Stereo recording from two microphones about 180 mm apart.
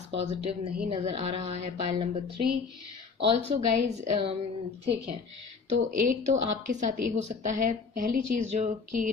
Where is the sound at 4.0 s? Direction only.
30° right (ahead or behind).